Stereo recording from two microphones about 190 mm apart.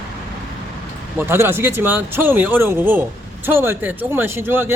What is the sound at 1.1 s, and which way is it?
Speech, 10° right (ahead or behind).